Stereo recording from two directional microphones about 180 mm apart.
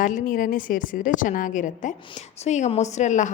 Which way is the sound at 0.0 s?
45° left (ahead or behind).